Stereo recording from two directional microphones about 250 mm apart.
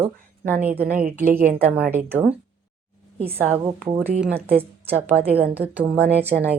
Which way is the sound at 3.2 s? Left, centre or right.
Right.